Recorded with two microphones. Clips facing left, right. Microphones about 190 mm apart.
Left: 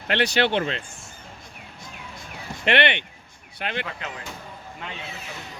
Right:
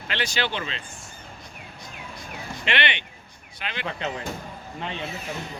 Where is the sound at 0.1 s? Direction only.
65° left (ahead or behind).